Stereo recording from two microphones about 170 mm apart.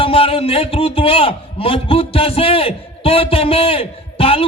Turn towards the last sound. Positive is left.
turn(degrees=35)  # may be behind; listen again after turning